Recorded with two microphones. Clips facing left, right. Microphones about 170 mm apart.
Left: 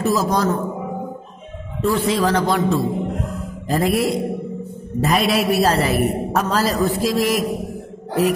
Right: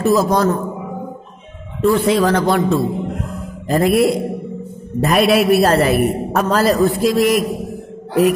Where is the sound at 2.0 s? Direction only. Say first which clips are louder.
Right 4 dB; 55° right (ahead or behind).